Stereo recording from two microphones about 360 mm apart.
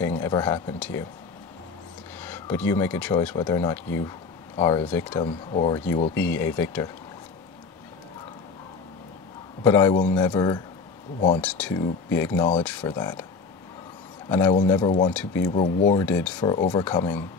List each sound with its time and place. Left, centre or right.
0.0 s speech: centre
2.1 s speech: centre
9.6 s a man's voice: centre
11.4 s speech: centre
15.0 s speech: centre